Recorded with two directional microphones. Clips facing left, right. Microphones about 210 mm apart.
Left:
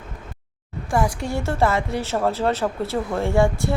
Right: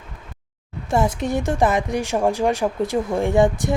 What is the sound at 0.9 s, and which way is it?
A woman's voice, 20° right (ahead or behind).